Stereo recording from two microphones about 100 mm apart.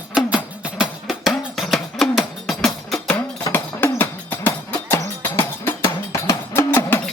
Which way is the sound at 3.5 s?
20° left (ahead or behind).